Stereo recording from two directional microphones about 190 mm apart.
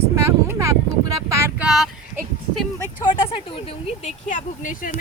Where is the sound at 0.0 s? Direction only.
10° right (ahead or behind).